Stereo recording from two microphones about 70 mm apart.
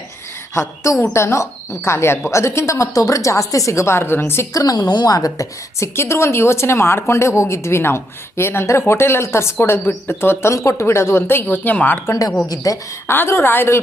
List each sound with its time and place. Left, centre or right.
0.5 s a woman's voice: left
4.5 s a woman's voice: left
6.0 s a woman's voice: left
12.0 s a woman's voice: left
13.1 s a woman's voice: left